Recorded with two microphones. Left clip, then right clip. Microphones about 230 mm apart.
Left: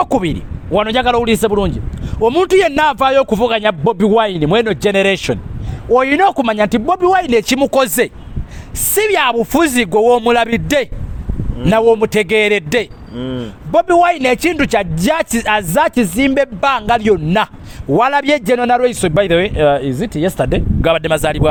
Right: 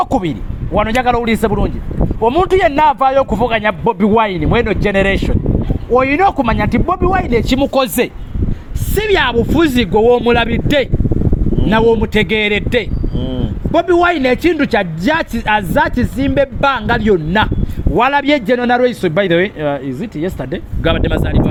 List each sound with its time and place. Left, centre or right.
0.0 s a man's voice: left
13.1 s speech: centre
13.7 s a man's voice: left